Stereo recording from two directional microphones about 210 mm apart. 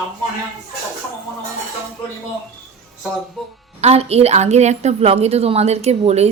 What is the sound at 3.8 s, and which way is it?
A woman's voice, 30° right (ahead or behind).